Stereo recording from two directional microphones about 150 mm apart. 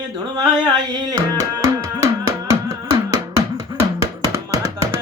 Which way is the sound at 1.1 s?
20° right (ahead or behind).